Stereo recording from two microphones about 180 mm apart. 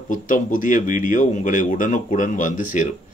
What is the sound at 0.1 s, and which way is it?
Speech, 45° left (ahead or behind).